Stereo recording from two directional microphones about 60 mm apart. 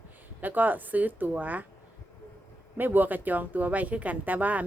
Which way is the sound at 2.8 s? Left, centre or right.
Right.